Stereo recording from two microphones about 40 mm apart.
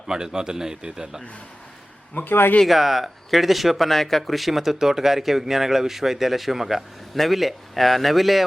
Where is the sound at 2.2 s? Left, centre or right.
Left.